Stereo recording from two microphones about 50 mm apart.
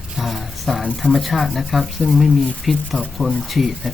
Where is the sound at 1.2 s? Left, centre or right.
Centre.